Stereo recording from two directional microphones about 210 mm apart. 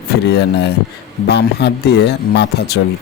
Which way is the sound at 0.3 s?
55° left (ahead or behind).